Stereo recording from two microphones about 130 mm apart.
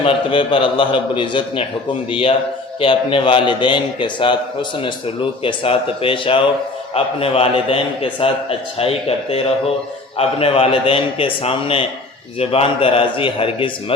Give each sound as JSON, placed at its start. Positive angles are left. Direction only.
{"t": 0.0, "sound": "a man's voice", "side_deg": 40}